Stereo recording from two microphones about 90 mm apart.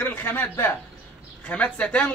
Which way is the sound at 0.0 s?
20° left (ahead or behind).